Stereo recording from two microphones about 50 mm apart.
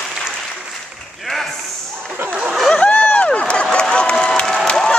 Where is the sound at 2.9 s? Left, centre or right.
Left.